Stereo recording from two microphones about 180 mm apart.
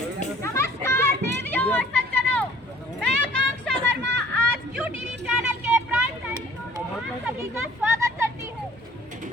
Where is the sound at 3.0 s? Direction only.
5° left (ahead or behind).